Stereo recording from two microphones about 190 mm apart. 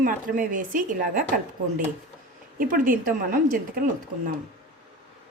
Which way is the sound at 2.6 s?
45° right (ahead or behind).